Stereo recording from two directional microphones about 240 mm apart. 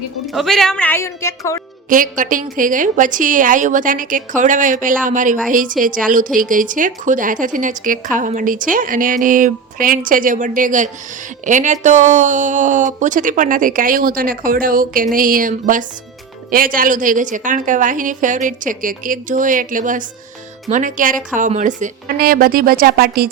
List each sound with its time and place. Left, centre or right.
0.3 s speech: centre
1.9 s speech: right